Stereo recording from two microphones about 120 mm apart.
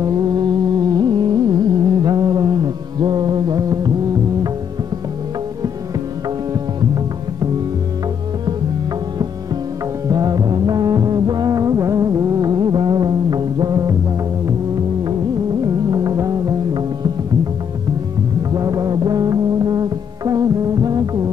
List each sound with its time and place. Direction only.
0.0 s music: 35° right (ahead or behind)
10.0 s music: 30° right (ahead or behind)
15.6 s music: 30° right (ahead or behind)
18.5 s music: 30° right (ahead or behind)